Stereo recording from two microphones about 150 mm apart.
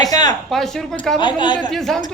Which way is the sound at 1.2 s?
30° left (ahead or behind).